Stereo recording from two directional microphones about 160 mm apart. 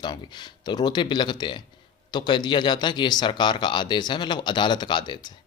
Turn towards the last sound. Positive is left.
turn(degrees=30)  # may be behind; listen again after turning